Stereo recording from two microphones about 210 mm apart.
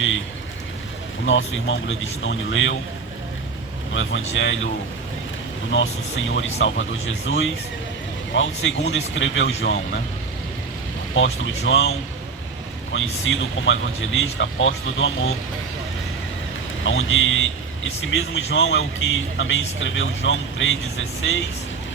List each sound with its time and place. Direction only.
1.2 s speech: 65° left (ahead or behind)
3.9 s speech: 65° left (ahead or behind)
5.7 s speech: 65° left (ahead or behind)
11.1 s speech: 65° left (ahead or behind)
16.8 s speech: 65° left (ahead or behind)